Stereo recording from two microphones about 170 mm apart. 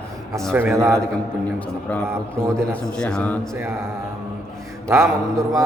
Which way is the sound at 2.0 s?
15° right (ahead or behind).